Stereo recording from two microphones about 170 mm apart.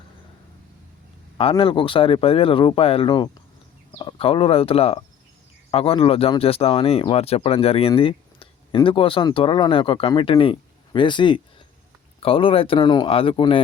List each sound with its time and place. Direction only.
1.4 s speech: 30° left (ahead or behind)